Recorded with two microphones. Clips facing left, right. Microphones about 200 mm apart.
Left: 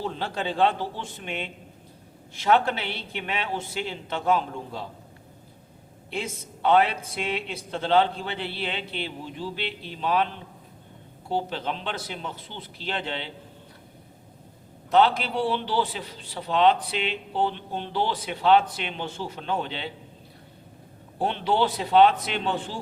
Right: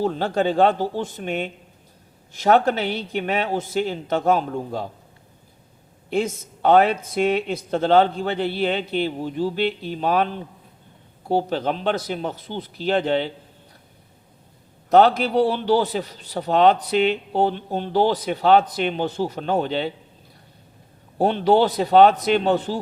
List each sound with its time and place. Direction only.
0.0 s a man's voice: 45° right (ahead or behind)
6.1 s a man's voice: 45° right (ahead or behind)
14.8 s a man's voice: 45° right (ahead or behind)
21.2 s a man's voice: 40° right (ahead or behind)